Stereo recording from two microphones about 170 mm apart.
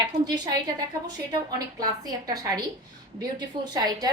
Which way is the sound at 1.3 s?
25° right (ahead or behind).